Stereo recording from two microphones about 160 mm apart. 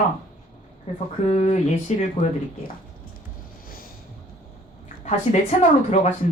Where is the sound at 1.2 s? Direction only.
45° left (ahead or behind).